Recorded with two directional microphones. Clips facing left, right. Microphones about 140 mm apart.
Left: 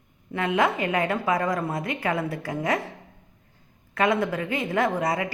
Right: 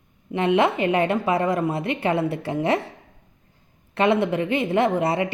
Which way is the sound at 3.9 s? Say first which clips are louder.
Right 3 dB; 25° right (ahead or behind).